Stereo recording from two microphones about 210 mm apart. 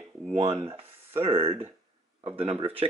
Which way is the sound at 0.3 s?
30° right (ahead or behind).